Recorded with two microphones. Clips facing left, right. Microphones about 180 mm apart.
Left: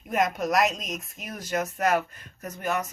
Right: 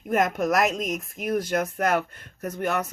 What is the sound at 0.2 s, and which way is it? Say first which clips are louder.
Speech: even; 50° right (ahead or behind).